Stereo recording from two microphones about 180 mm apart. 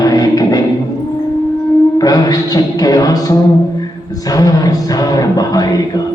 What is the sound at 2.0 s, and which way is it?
Music, 20° left (ahead or behind).